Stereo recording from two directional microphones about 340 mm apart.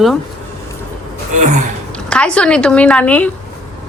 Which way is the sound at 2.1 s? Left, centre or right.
Centre.